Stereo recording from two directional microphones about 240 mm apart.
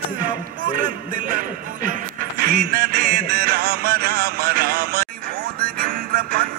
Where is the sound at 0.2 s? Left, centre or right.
Right.